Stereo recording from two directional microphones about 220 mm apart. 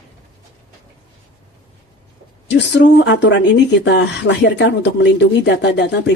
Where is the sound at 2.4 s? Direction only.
55° left (ahead or behind).